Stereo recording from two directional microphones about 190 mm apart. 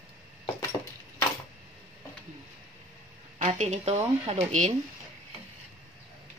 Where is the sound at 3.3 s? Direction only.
40° right (ahead or behind).